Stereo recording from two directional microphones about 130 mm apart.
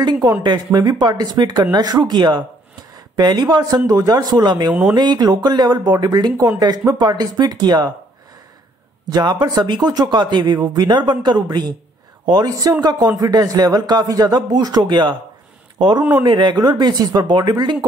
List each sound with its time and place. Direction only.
0.0 s speech: 30° right (ahead or behind)
9.1 s speech: 30° right (ahead or behind)
16.0 s speech: 10° right (ahead or behind)
16.3 s speech: 35° right (ahead or behind)